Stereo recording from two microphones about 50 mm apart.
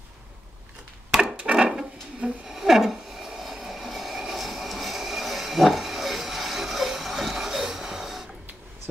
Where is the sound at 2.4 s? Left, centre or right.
Centre.